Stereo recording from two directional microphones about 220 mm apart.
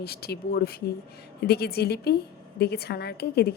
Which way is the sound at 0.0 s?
45° left (ahead or behind).